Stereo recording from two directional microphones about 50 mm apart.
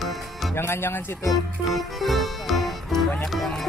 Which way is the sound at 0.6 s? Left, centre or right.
Left.